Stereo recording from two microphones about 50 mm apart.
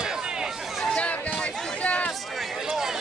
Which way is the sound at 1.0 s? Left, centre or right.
Left.